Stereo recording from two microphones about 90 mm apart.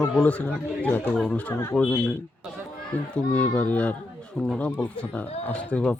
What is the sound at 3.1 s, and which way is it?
Speech, 15° left (ahead or behind).